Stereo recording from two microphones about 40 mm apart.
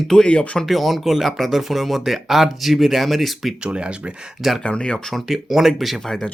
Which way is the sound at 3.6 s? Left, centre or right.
Right.